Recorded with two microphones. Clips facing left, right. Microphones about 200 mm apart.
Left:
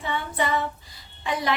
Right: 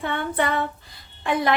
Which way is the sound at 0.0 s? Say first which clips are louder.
Right 3 dB; 60° right (ahead or behind).